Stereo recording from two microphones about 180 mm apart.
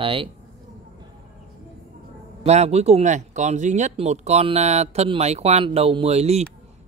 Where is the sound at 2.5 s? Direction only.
35° right (ahead or behind).